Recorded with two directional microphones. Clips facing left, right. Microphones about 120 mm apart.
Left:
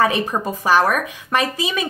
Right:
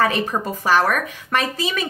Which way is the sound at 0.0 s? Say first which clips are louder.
Left 1 dB; 15° left (ahead or behind).